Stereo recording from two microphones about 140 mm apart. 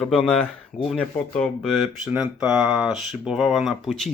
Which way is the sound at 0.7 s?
70° left (ahead or behind).